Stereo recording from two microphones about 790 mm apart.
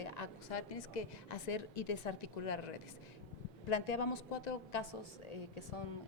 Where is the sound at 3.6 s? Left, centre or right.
Left.